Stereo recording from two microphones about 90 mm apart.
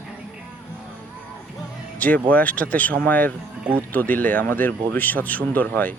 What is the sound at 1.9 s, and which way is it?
Speech, 15° left (ahead or behind).